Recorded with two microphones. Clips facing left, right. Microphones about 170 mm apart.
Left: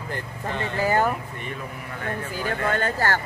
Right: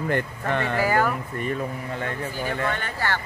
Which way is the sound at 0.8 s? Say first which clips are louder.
Left 1 dB; 20° left (ahead or behind).